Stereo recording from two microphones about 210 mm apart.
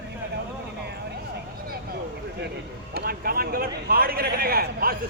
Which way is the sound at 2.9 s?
45° right (ahead or behind).